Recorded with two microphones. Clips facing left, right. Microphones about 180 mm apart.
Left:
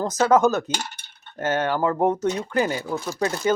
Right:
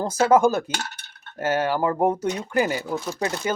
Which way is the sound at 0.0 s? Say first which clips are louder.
Even; 10° right (ahead or behind).